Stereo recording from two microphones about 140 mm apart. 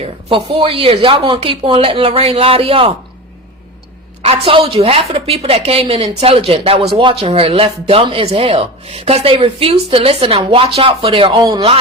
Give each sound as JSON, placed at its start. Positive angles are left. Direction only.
{"t": 0.0, "sound": "speech", "side_deg": -40}
{"t": 4.2, "sound": "speech", "side_deg": -45}